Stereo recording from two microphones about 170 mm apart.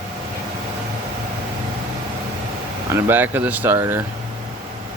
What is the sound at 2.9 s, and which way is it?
Speech, 10° right (ahead or behind).